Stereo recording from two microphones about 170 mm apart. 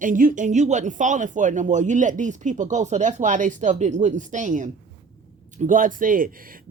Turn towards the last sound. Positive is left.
turn(degrees=-55)  # may be behind; listen again after turning